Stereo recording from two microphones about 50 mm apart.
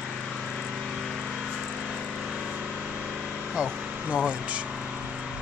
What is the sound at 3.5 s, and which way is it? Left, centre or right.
Vehicle, right.